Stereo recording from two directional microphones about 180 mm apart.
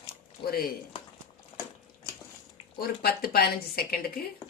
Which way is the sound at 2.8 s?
60° left (ahead or behind).